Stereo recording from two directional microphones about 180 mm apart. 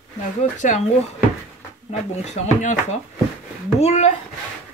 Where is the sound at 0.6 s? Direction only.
45° left (ahead or behind).